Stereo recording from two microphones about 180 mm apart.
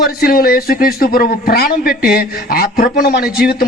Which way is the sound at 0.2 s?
55° left (ahead or behind).